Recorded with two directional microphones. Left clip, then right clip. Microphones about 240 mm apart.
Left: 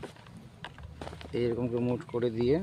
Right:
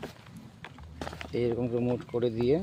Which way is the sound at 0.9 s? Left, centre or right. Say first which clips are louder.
Right 7 dB; right.